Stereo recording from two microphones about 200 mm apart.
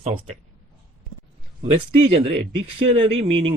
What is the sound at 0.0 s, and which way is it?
Speech, 30° right (ahead or behind).